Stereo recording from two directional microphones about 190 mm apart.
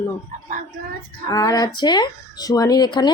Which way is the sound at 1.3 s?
20° left (ahead or behind).